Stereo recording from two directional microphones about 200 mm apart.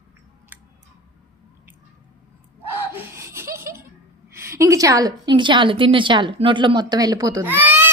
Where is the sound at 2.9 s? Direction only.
10° right (ahead or behind).